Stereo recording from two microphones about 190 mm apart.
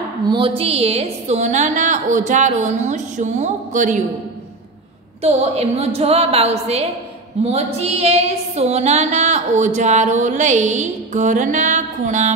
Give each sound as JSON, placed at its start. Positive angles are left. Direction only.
{"t": 0.3, "sound": "female singing", "side_deg": -30}
{"t": 5.2, "sound": "female singing", "side_deg": -30}